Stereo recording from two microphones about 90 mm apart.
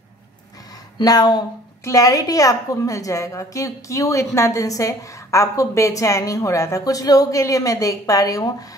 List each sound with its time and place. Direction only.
1.0 s a woman's voice: 45° left (ahead or behind)